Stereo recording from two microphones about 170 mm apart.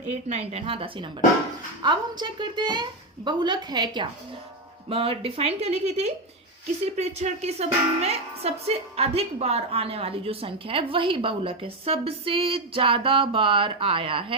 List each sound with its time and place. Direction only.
0.1 s a woman's voice: 40° right (ahead or behind)